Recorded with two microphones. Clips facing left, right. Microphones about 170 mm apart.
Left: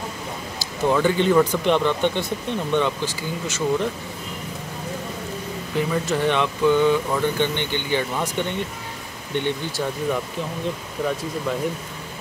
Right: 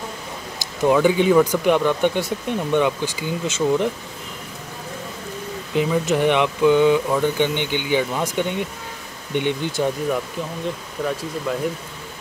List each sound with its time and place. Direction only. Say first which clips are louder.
0.6 s speech: right 3 dB; 10° right (ahead or behind)
5.8 s speech: right 3 dB; 15° right (ahead or behind)
11.0 s speech: even; 5° left (ahead or behind)